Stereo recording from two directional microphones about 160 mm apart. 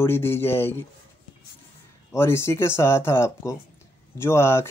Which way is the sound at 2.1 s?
15° left (ahead or behind).